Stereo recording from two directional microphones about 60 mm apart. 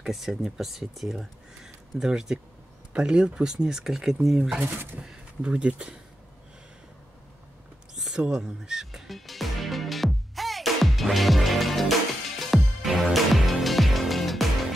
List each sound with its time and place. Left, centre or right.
0.0 s speech: centre
4.6 s speech: right
5.0 s speech: centre
7.9 s music: centre